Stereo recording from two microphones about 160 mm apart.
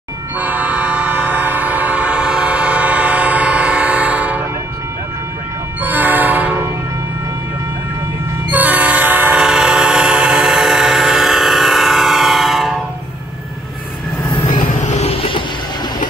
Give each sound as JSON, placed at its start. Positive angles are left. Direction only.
{"t": 0.4, "sound": "train", "side_deg": -10}
{"t": 5.8, "sound": "train", "side_deg": -10}
{"t": 8.5, "sound": "train", "side_deg": -10}
{"t": 14.5, "sound": "vehicle", "side_deg": 55}